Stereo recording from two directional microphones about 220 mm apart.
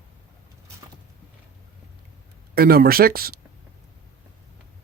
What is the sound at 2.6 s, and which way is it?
Speech, 45° right (ahead or behind).